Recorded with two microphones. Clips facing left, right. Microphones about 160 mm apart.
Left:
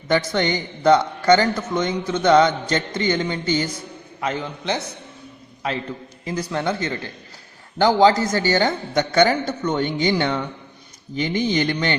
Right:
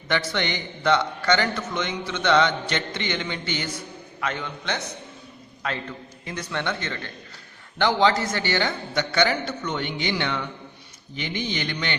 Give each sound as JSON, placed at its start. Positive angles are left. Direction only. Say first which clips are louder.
{"t": 0.1, "sound": "a man's voice", "louder": "left 6 dB", "side_deg": 40}
{"t": 6.2, "sound": "a man's voice", "louder": "left 6 dB", "side_deg": 35}